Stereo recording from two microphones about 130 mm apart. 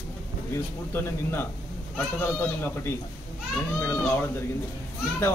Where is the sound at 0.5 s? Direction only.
15° left (ahead or behind).